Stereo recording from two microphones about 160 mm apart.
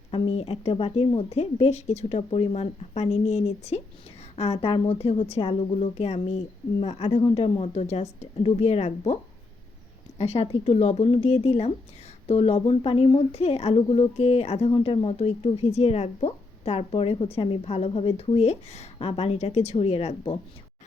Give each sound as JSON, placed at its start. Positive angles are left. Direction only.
{"t": 0.1, "sound": "speech", "side_deg": 35}
{"t": 10.2, "sound": "speech", "side_deg": 40}